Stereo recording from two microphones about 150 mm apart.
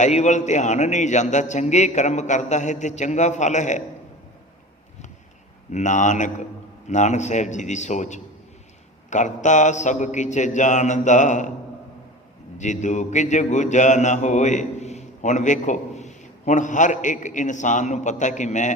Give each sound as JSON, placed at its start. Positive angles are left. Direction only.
{"t": 0.0, "sound": "mantra", "side_deg": 50}
{"t": 5.7, "sound": "mantra", "side_deg": 55}
{"t": 12.5, "sound": "mantra", "side_deg": 55}